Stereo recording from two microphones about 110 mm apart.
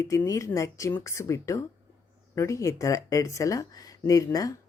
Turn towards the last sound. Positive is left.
turn(degrees=30)  # may be behind; listen again after turning